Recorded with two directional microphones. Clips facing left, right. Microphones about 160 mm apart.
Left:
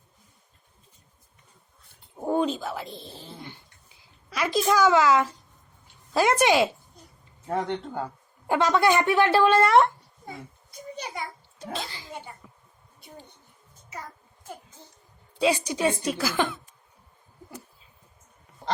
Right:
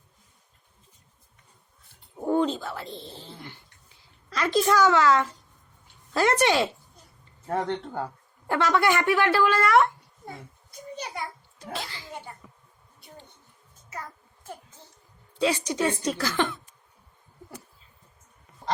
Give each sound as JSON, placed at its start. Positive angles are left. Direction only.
{"t": 2.2, "sound": "a woman's voice", "side_deg": 15}
{"t": 3.2, "sound": "dog", "side_deg": 20}
{"t": 4.3, "sound": "a woman's voice", "side_deg": 10}
{"t": 8.4, "sound": "speech", "side_deg": 15}
{"t": 11.7, "sound": "a sound", "side_deg": 20}
{"t": 15.4, "sound": "a woman's voice", "side_deg": 15}